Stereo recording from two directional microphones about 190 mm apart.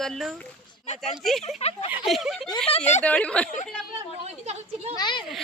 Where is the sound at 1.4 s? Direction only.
35° left (ahead or behind).